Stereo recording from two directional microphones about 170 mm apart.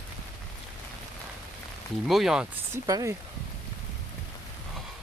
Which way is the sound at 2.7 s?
15° right (ahead or behind).